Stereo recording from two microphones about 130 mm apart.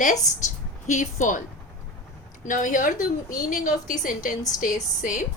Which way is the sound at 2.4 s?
85° left.